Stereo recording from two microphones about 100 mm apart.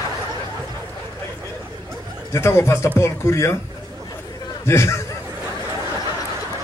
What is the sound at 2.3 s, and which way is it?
Speech, 25° left (ahead or behind).